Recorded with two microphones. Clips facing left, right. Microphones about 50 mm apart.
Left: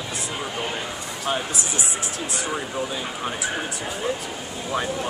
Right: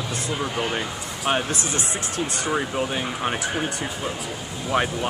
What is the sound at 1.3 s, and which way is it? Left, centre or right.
Speech, right.